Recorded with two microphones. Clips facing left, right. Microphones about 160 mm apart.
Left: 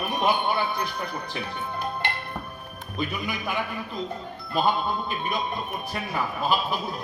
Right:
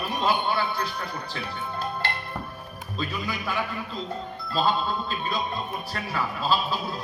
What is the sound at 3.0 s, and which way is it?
Music, 15° left (ahead or behind).